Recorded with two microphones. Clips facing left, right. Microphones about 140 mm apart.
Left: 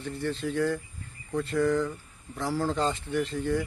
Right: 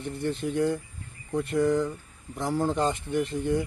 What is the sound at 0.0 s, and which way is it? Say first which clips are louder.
Speech: right 2 dB; 20° right (ahead or behind).